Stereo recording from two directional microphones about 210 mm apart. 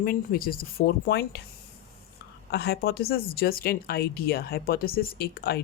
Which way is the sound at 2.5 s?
50° left (ahead or behind).